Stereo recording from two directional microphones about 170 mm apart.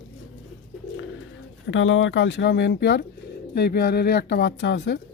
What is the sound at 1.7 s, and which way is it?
Speech, 90° left.